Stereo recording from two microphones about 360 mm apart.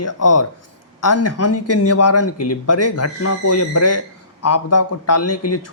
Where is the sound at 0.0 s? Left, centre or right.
Left.